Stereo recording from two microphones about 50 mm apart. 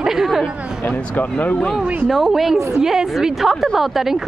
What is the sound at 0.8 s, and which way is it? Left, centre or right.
Speech, left.